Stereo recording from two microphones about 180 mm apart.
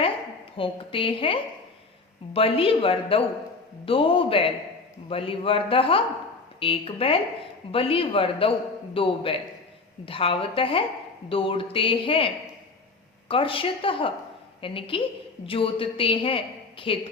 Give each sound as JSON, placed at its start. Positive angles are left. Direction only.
{"t": 0.5, "sound": "a woman's voice", "side_deg": 30}